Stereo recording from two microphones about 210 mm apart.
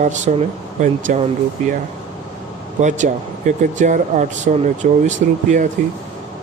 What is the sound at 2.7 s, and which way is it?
Speech, 35° right (ahead or behind).